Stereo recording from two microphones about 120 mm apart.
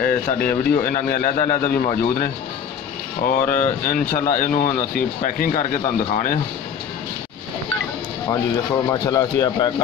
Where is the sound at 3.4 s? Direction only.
90° left.